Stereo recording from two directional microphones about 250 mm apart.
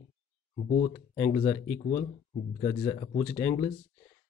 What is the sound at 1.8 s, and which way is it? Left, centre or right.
Speech, left.